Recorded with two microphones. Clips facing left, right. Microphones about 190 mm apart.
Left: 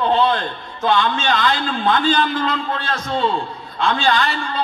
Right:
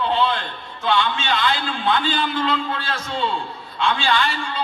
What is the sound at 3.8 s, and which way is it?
Speech, 40° left (ahead or behind).